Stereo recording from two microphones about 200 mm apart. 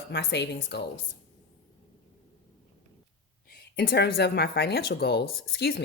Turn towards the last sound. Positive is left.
turn(degrees=55)  # may be behind; listen again after turning